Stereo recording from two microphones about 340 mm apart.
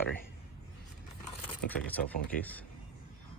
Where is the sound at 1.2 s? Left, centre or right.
Centre.